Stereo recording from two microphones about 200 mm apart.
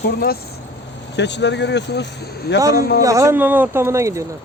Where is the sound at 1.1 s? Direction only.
60° left (ahead or behind).